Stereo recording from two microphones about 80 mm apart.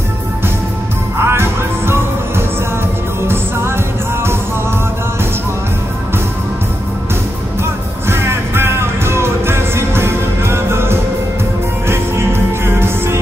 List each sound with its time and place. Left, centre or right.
1.2 s music: right
8.1 s music: right